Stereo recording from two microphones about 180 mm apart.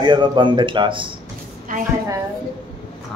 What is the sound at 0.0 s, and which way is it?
A man's voice, 25° right (ahead or behind).